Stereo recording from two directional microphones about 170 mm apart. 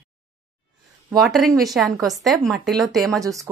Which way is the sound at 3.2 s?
20° right (ahead or behind).